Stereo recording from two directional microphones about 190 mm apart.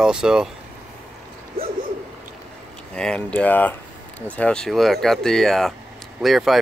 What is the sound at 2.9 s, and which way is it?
Speech, 5° left (ahead or behind).